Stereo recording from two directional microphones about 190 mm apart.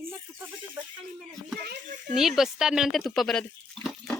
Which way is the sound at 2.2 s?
Centre (ahead or behind).